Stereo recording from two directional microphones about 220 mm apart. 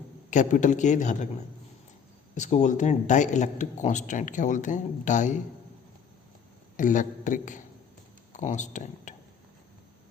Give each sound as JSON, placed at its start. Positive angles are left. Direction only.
{"t": 0.3, "sound": "a man's voice", "side_deg": 35}
{"t": 2.3, "sound": "a man's voice", "side_deg": 35}
{"t": 6.7, "sound": "a man's voice", "side_deg": 35}